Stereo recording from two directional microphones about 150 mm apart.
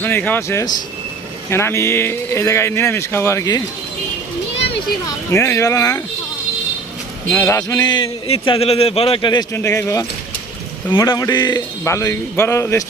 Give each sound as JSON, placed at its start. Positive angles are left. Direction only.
{"t": 0.0, "sound": "a man's voice", "side_deg": 10}
{"t": 5.0, "sound": "a man's voice", "side_deg": 20}
{"t": 7.3, "sound": "a man's voice", "side_deg": 15}
{"t": 9.5, "sound": "a man's voice", "side_deg": 20}